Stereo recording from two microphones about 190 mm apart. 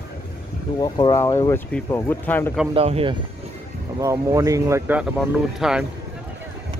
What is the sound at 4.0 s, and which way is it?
Speech, 15° right (ahead or behind).